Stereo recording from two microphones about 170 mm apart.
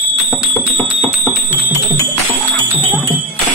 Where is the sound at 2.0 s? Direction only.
15° left (ahead or behind).